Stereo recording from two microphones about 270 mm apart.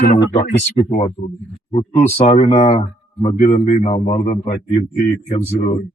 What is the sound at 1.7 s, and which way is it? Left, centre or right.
A man's voice, left.